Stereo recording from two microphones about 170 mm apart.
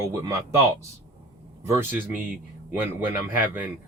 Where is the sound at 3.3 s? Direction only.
10° right (ahead or behind).